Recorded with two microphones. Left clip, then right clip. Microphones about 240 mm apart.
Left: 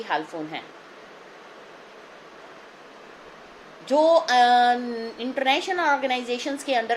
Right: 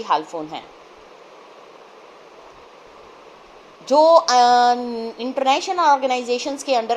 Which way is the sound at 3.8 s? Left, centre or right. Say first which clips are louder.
Right 6 dB; centre.